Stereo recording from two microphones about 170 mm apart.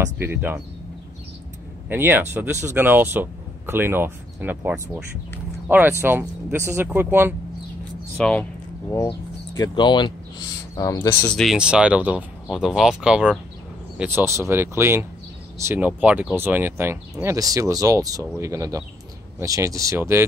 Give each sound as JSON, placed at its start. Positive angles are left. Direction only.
{"t": 0.2, "sound": "speech", "side_deg": -15}
{"t": 1.9, "sound": "speech", "side_deg": -10}
{"t": 8.2, "sound": "speech", "side_deg": 5}
{"t": 9.6, "sound": "speech", "side_deg": 25}